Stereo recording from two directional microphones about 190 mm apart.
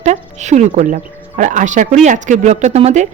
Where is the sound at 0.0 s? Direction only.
40° right (ahead or behind).